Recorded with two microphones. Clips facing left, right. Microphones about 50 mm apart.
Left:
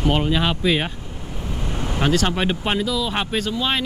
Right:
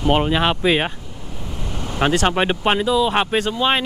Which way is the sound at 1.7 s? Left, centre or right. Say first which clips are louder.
Left 1 dB; centre.